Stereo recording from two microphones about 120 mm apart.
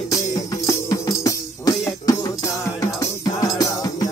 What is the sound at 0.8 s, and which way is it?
Music, 30° left (ahead or behind).